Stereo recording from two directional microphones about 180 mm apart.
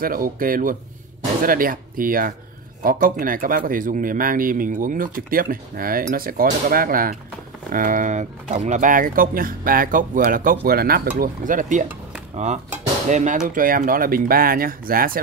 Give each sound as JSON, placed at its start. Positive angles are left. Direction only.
{"t": 0.0, "sound": "a man's voice", "side_deg": -50}
{"t": 13.1, "sound": "a man's voice", "side_deg": -40}